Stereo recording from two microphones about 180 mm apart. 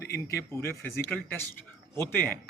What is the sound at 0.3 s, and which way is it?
Speech, 15° left (ahead or behind).